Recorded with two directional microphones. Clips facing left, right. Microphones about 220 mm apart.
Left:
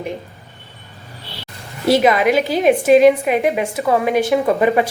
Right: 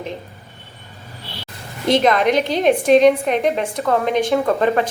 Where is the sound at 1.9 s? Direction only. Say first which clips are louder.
Left 2 dB; 5° left (ahead or behind).